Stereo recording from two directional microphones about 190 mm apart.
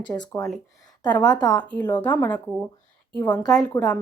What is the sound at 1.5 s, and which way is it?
Speech, 10° left (ahead or behind).